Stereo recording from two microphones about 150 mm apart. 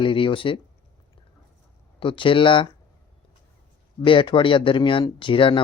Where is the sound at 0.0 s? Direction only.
35° left (ahead or behind).